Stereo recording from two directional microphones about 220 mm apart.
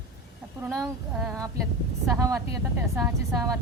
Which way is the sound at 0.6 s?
15° right (ahead or behind).